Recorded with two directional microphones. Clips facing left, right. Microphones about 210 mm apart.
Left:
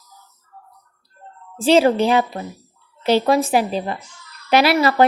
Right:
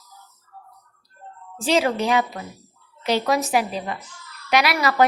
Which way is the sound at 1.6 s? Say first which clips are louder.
Left 6 dB; 30° left (ahead or behind).